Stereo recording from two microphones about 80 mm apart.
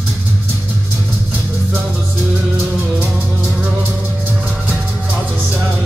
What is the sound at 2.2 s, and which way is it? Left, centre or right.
Music, centre.